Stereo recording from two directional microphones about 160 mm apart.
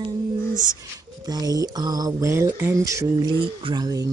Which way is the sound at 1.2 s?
25° right (ahead or behind).